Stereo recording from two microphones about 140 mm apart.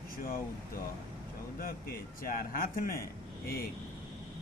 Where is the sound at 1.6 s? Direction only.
90° left.